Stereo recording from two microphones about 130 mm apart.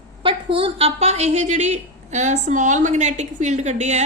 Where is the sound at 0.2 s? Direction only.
45° right (ahead or behind).